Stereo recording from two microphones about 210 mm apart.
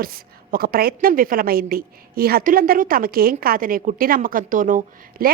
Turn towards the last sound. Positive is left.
turn(degrees=-45)  # may be behind; listen again after turning